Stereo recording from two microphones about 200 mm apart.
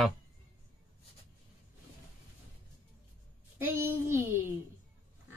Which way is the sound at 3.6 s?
10° right (ahead or behind).